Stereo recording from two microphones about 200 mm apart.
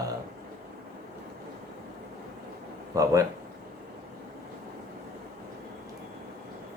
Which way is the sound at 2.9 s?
15° right (ahead or behind).